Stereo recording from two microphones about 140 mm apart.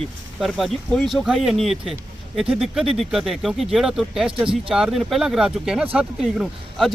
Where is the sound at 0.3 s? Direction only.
Centre (ahead or behind).